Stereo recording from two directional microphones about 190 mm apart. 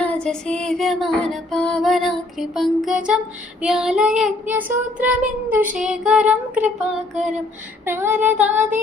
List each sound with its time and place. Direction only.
0.0 s female singing: 5° left (ahead or behind)
7.9 s child singing: 10° right (ahead or behind)